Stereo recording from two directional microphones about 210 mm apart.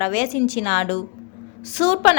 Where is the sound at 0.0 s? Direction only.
25° left (ahead or behind).